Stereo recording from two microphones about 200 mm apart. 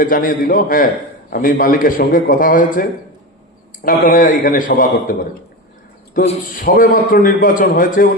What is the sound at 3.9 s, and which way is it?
A man's voice, 45° left (ahead or behind).